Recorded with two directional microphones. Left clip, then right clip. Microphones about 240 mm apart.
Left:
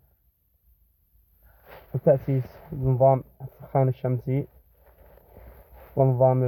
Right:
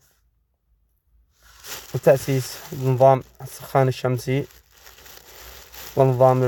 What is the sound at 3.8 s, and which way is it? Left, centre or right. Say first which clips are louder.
Speech: right 5 dB; centre.